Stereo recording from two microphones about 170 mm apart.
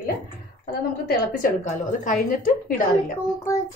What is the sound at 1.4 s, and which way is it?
A woman's voice, 50° left (ahead or behind).